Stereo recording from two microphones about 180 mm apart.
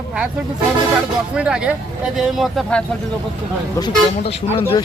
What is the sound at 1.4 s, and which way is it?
Speech, 5° right (ahead or behind).